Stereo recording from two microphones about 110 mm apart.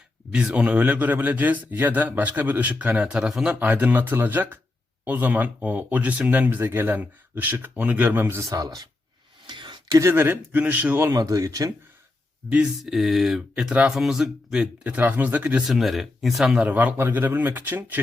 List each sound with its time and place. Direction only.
0.3 s a man's voice: 10° right (ahead or behind); by 8.9 s 35° right (ahead or behind)
9.5 s a sound: 45° right (ahead or behind)
10.0 s a man's voice: 20° right (ahead or behind)
11.1 s speech: 35° right (ahead or behind)
12.5 s speech: 5° right (ahead or behind)
15.6 s a man's voice: centre (ahead or behind); by 18.0 s 15° right (ahead or behind)